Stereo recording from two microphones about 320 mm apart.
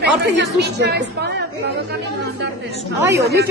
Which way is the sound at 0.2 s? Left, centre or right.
Right.